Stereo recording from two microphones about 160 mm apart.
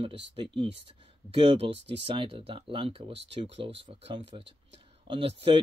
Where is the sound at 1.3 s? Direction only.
35° right (ahead or behind).